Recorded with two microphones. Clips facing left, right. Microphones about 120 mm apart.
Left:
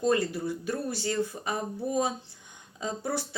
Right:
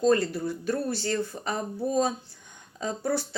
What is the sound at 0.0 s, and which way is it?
Speech, 15° left (ahead or behind).